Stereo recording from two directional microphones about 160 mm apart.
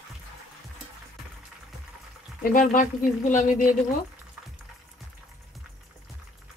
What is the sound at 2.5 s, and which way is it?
Speech, 55° left (ahead or behind).